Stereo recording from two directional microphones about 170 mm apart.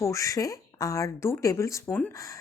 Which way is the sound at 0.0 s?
20° left (ahead or behind).